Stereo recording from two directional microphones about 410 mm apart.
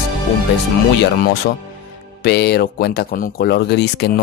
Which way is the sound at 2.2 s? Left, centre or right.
Left.